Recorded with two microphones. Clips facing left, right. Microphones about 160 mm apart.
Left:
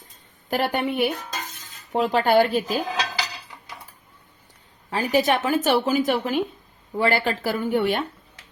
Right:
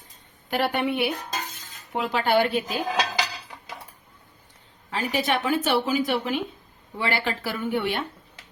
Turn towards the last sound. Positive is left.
turn(degrees=45)  # may be behind; listen again after turning